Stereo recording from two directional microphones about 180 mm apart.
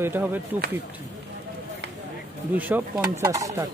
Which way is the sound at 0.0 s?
10° right (ahead or behind).